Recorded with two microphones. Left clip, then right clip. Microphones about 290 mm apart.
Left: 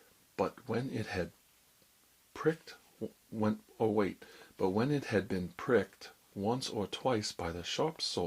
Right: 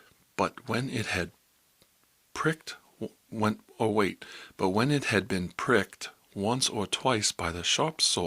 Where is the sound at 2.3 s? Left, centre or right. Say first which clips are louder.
Right 4 dB; right.